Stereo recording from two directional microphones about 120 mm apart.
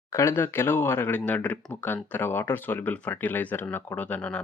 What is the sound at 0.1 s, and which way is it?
Speech, 25° left (ahead or behind).